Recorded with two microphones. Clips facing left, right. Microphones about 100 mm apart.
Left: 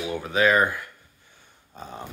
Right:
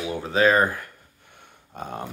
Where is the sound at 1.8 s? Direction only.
60° right (ahead or behind).